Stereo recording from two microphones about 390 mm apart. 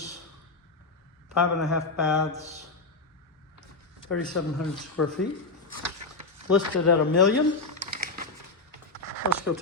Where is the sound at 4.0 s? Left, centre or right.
Left.